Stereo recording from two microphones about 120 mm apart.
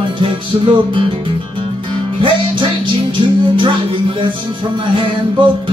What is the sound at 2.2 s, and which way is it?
Music, 45° right (ahead or behind).